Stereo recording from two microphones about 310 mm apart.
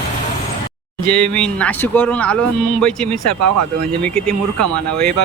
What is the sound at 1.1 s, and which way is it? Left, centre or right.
Speech, centre.